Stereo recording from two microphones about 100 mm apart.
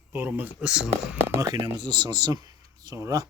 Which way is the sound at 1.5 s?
45° right (ahead or behind).